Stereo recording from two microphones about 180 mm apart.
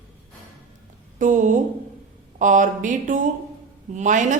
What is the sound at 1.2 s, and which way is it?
A woman's voice, 45° right (ahead or behind).